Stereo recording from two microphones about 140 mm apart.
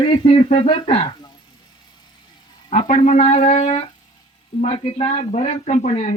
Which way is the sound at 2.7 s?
50° left (ahead or behind).